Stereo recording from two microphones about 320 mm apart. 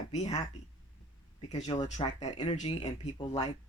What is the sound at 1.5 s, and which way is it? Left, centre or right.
Speech, centre.